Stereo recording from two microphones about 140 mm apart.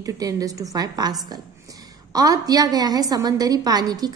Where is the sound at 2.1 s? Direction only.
25° right (ahead or behind).